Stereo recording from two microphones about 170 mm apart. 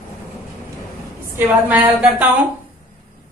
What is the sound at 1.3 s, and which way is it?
A woman's voice, 10° right (ahead or behind).